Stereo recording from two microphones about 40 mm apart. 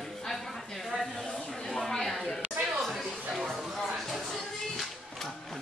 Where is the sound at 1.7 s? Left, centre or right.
Centre.